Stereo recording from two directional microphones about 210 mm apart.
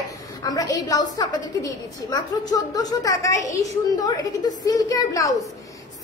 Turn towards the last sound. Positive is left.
turn(degrees=15)  # may be behind; listen again after turning